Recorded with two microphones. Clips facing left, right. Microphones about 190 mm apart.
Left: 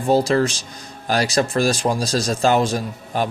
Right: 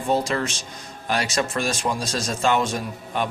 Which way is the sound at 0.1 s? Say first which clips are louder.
Left 6 dB; 35° left (ahead or behind).